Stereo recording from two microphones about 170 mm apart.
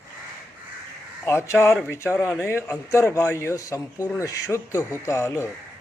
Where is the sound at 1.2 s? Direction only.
15° left (ahead or behind).